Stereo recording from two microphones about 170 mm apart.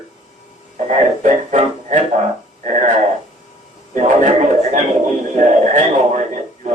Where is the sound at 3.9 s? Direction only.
45° right (ahead or behind).